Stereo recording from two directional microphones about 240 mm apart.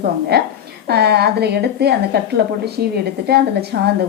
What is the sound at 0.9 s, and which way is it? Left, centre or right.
A woman's voice, right.